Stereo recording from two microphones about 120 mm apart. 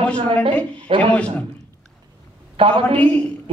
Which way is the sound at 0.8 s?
45° right (ahead or behind).